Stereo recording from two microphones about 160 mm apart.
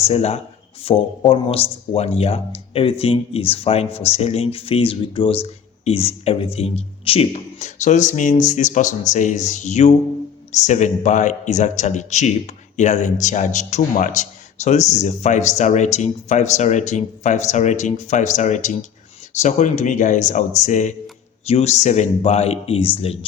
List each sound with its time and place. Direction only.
0.0 s speech: 40° left (ahead or behind)